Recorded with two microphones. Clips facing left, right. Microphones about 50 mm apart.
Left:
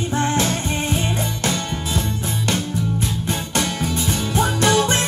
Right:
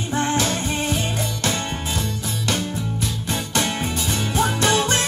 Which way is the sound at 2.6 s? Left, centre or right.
Right.